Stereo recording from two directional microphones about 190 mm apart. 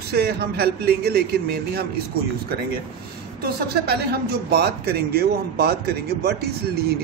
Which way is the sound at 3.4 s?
55° right (ahead or behind).